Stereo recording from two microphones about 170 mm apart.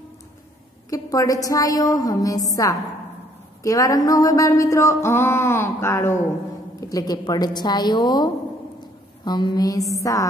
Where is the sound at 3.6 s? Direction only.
20° left (ahead or behind).